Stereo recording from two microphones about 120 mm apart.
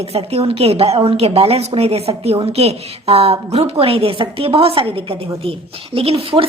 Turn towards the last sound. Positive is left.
turn(degrees=-50)  # may be behind; listen again after turning